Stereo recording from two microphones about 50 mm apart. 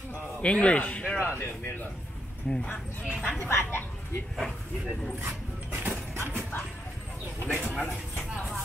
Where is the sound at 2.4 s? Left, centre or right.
Centre.